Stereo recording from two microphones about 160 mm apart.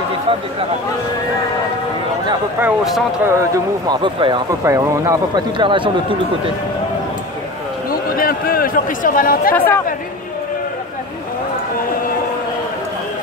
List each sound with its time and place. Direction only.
2.6 s speech: centre (ahead or behind)
3.3 s speech: 20° right (ahead or behind)
4.6 s speech: 20° right (ahead or behind)
7.9 s a sound: 65° left (ahead or behind)